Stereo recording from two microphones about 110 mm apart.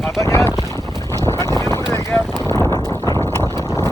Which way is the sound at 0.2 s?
25° left (ahead or behind).